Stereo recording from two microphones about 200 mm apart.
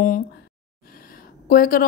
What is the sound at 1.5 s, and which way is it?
Speech, 45° left (ahead or behind).